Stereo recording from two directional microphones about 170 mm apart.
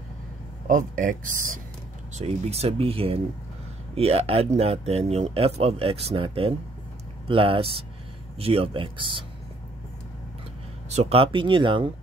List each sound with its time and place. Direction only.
0.7 s speech: 50° right (ahead or behind)
2.1 s speech: 40° right (ahead or behind)
10.9 s speech: 40° right (ahead or behind)